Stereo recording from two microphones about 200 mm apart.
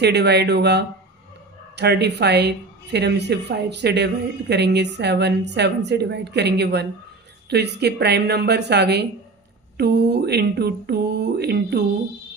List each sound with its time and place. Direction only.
0.0 s speech: 55° right (ahead or behind)